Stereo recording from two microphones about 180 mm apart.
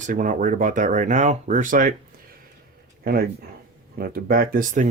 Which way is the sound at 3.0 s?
55° right (ahead or behind).